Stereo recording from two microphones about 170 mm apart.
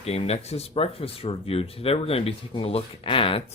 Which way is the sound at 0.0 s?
35° left (ahead or behind).